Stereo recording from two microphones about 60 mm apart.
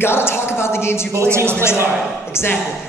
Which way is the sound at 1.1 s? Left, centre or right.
Right.